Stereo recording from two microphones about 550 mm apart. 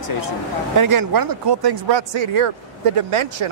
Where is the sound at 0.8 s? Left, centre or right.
Right.